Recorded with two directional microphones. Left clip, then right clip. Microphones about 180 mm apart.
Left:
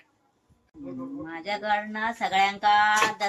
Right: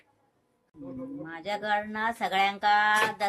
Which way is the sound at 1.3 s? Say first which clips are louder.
Left 2 dB; 15° right (ahead or behind).